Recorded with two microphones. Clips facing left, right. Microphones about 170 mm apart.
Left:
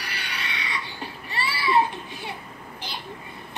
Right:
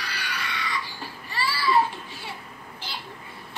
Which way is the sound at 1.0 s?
20° left (ahead or behind).